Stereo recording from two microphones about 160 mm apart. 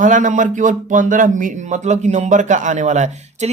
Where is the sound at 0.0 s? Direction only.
55° right (ahead or behind).